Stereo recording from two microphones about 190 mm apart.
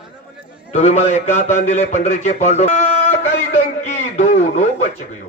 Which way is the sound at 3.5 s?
40° left (ahead or behind).